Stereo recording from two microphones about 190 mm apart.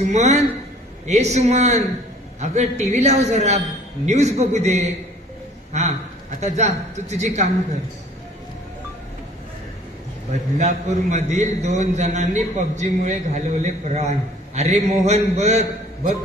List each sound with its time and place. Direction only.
0.0 s a man's voice: 35° right (ahead or behind)
10.6 s a man's voice: 35° right (ahead or behind)